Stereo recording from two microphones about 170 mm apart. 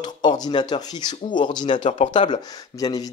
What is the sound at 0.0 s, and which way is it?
Speech, 25° left (ahead or behind).